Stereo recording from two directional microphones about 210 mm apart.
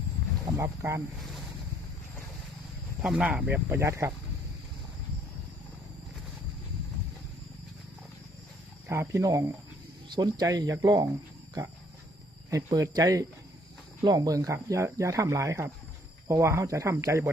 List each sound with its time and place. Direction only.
0.5 s speech: 15° right (ahead or behind)
3.0 s speech: 5° right (ahead or behind)
8.9 s speech: 15° right (ahead or behind)
12.5 s speech: 15° right (ahead or behind)